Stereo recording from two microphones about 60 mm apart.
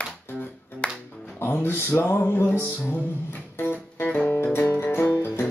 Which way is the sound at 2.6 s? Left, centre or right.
Left.